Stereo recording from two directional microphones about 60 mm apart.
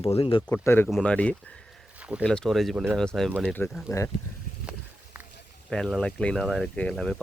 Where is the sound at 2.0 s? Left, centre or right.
Right.